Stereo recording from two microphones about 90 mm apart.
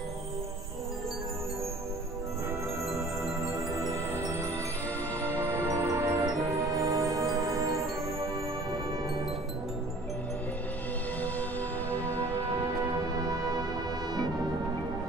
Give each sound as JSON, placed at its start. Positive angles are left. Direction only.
{"t": 3.9, "sound": "music", "side_deg": -30}
{"t": 5.9, "sound": "music", "side_deg": -35}
{"t": 11.9, "sound": "music", "side_deg": 20}
{"t": 12.2, "sound": "music", "side_deg": -40}